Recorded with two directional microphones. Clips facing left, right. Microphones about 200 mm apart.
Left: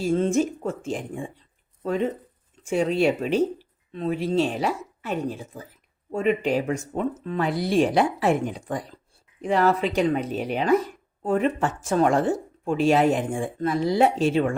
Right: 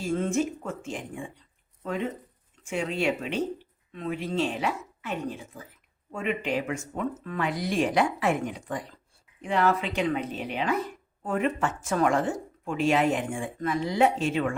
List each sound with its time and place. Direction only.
0.0 s speech: 35° left (ahead or behind)
2.6 s speech: 40° left (ahead or behind)